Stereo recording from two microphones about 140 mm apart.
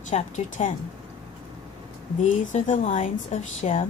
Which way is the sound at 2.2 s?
60° left (ahead or behind).